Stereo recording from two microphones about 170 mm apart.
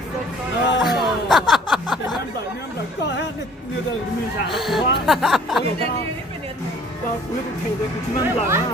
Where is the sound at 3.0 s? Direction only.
90° left.